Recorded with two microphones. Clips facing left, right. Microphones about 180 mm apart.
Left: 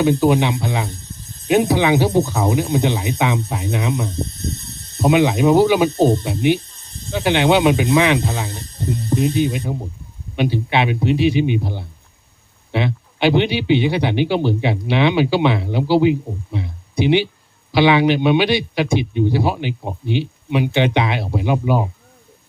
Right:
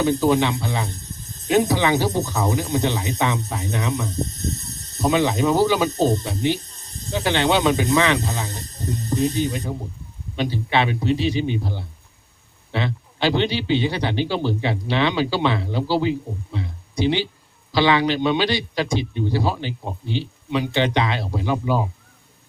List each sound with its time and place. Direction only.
0.0 s speech: 20° left (ahead or behind)
4.1 s a sound: 40° right (ahead or behind)
5.0 s speech: 15° left (ahead or behind)
6.6 s snake: 40° right (ahead or behind)
7.2 s speech: 15° left (ahead or behind)
8.4 s music: 40° right (ahead or behind)
9.1 s speech: 15° left (ahead or behind)